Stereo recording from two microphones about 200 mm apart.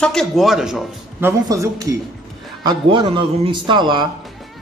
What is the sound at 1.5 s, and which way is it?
A man's voice, 15° right (ahead or behind).